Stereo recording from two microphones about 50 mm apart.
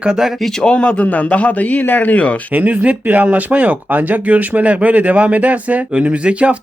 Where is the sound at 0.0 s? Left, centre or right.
Centre.